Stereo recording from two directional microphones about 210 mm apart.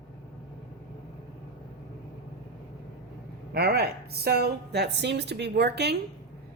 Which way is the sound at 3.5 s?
50° right (ahead or behind).